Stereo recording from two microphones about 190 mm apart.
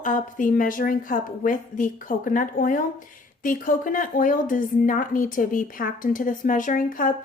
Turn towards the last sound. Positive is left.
turn(degrees=45)  # may be behind; listen again after turning